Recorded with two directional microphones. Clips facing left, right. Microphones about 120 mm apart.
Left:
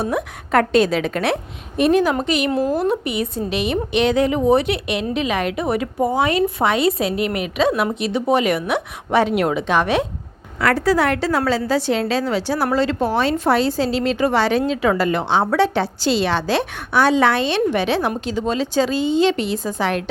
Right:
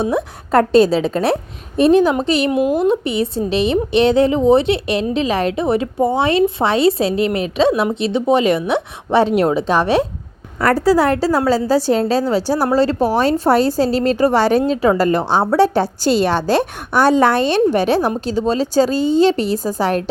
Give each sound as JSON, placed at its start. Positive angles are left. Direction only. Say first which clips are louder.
{"t": 0.0, "sound": "a woman's voice", "louder": "right 4 dB", "side_deg": -30}
{"t": 2.5, "sound": "a woman's voice", "louder": "right 4 dB", "side_deg": -15}